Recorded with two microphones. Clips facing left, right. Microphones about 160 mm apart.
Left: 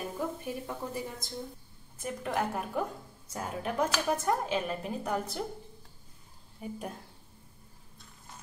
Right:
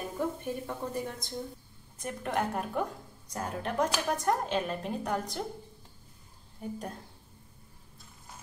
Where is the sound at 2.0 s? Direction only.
Centre (ahead or behind).